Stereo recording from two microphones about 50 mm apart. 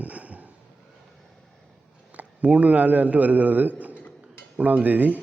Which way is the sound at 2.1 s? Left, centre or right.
Right.